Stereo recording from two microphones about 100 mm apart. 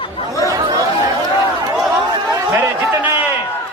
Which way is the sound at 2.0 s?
40° right (ahead or behind).